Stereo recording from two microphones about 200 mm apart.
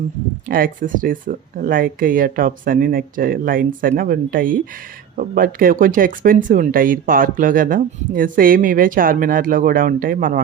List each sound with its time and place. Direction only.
0.4 s speech: 45° right (ahead or behind)